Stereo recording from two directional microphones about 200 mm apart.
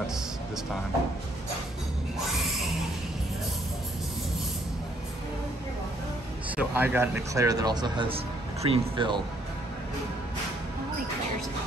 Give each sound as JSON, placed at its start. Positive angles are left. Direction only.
{"t": 6.5, "sound": "speech", "side_deg": -10}